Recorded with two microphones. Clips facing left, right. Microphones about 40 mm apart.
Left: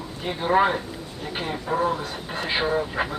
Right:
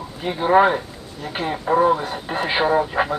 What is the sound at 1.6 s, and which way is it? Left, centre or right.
Speech, right.